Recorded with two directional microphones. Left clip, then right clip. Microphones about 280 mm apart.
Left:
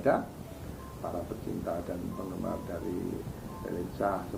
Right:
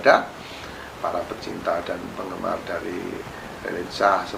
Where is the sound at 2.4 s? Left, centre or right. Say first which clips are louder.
Right 11 dB; centre.